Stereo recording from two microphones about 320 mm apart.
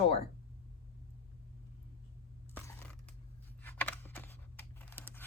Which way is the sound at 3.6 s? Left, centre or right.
Centre.